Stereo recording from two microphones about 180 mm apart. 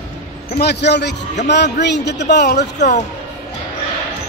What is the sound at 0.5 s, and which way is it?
Speech, 65° left (ahead or behind).